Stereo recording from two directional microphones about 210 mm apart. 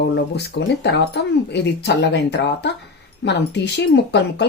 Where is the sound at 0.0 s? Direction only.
55° left (ahead or behind).